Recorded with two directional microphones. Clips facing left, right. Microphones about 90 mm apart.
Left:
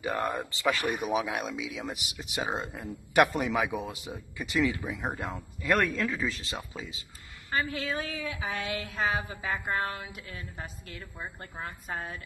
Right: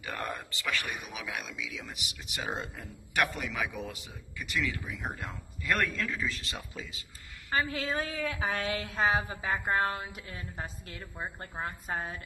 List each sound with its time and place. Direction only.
0.0 s speech: 25° left (ahead or behind); by 2.2 s 40° left (ahead or behind)
2.3 s speech: 25° left (ahead or behind)
3.6 s a man's voice: 15° left (ahead or behind)
5.3 s a man's voice: 20° left (ahead or behind)
7.5 s a woman's voice: 35° right (ahead or behind)